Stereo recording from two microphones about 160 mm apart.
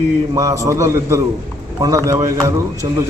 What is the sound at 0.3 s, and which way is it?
A man's voice, 20° right (ahead or behind).